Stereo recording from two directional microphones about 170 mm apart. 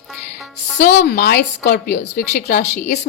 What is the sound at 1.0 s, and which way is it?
A woman's voice, 70° left (ahead or behind).